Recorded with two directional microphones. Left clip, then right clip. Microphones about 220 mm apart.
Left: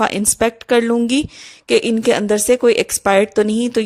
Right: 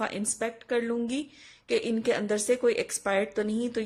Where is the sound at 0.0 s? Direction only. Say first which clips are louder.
Left 15 dB; 40° left (ahead or behind).